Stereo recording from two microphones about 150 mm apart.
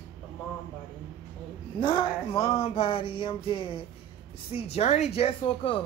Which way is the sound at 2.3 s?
40° left (ahead or behind).